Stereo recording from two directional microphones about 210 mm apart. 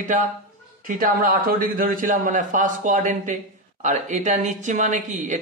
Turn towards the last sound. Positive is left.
turn(degrees=-35)  # may be behind; listen again after turning